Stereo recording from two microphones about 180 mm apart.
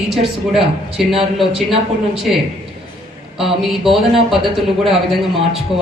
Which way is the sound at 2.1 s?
Centre (ahead or behind).